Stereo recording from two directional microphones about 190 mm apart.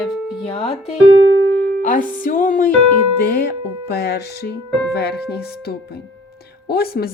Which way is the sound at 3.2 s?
55° left (ahead or behind).